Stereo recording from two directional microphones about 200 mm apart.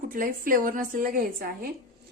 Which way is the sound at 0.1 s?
45° right (ahead or behind).